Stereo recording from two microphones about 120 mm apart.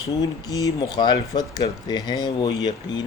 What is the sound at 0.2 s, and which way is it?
Speech, 30° left (ahead or behind).